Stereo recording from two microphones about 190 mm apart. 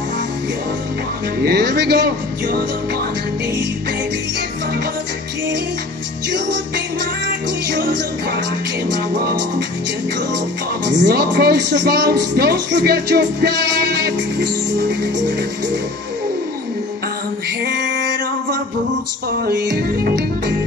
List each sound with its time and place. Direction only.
1.4 s speech: 60° right (ahead or behind)
11.0 s speech: 55° right (ahead or behind)
17.7 s music: 70° right (ahead or behind)
19.4 s speech: 55° right (ahead or behind)